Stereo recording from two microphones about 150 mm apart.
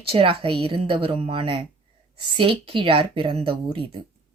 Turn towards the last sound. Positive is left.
turn(degrees=-35)  # may be behind; listen again after turning